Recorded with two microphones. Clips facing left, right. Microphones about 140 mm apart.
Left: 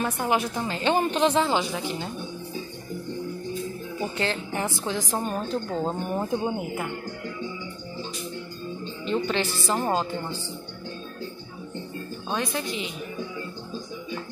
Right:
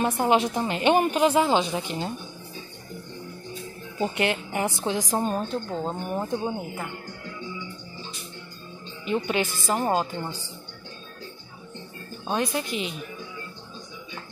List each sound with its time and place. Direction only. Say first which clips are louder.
0.0 s a woman's voice: right 3 dB; 25° right (ahead or behind); by 1.5 s 10° right (ahead or behind)
1.5 s speech: right 2 dB; 20° right (ahead or behind)
4.0 s a woman's voice: right 4 dB; 15° right (ahead or behind)
5.5 s speech: left 2 dB; centre (ahead or behind)
9.0 s a woman's voice: even; 10° right (ahead or behind)
12.3 s a woman's voice: right 3 dB; 15° right (ahead or behind)